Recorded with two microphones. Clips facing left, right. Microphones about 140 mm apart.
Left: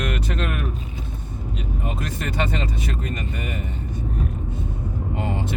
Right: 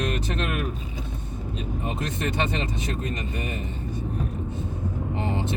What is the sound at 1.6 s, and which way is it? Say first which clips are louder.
Speech: even; 25° right (ahead or behind).